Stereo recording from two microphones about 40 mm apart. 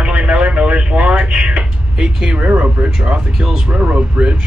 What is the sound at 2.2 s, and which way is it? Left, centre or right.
Speech, right.